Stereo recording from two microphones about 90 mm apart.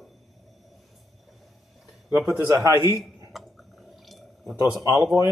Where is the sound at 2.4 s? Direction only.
35° right (ahead or behind).